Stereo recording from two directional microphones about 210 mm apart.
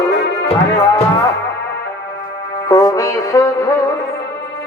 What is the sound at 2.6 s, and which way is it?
Music, 15° left (ahead or behind).